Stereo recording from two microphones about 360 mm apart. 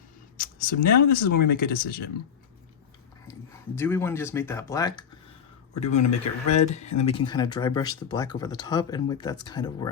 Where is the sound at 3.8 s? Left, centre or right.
Centre.